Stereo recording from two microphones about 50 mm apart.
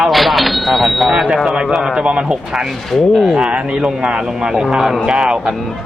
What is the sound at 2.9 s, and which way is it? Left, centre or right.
Speech, centre.